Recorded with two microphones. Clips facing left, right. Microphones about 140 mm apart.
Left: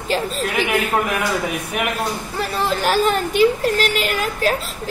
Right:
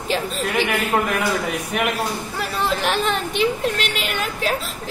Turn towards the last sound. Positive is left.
turn(degrees=0)  # may be behind; listen again after turning